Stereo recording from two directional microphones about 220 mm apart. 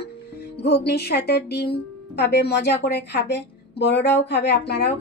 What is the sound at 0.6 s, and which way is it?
A woman's voice, 50° left (ahead or behind).